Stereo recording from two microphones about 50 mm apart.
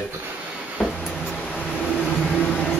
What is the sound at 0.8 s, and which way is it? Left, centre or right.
Vehicle, right.